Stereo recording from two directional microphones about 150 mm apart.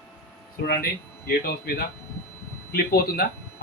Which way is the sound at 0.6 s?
90° left.